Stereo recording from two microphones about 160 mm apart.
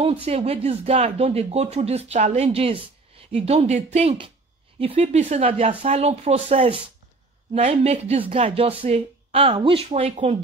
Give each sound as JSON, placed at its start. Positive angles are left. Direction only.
{"t": 0.0, "sound": "speech", "side_deg": -40}